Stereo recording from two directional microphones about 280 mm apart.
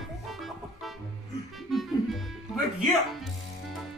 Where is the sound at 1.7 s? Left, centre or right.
Centre.